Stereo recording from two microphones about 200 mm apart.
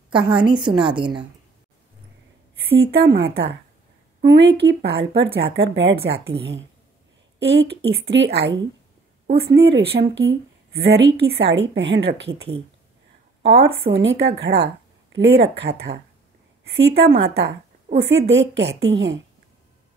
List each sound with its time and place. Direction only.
0.1 s a woman's voice: 25° right (ahead or behind)
3.0 s a woman's voice: 55° right (ahead or behind)
7.9 s a woman's voice: 60° right (ahead or behind)
13.4 s a woman's voice: 55° right (ahead or behind)